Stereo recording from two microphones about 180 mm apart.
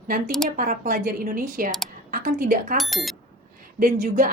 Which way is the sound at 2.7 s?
Centre (ahead or behind).